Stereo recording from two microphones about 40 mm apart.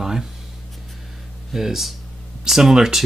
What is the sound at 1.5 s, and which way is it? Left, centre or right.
Speech, centre.